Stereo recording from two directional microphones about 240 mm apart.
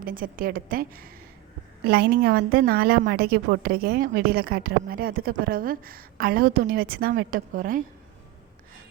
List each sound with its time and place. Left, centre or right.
0.0 s a woman's voice: right